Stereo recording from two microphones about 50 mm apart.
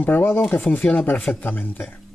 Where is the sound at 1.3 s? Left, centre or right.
Left.